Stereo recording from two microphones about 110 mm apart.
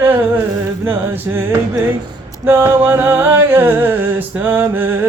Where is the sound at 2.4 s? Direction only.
20° right (ahead or behind).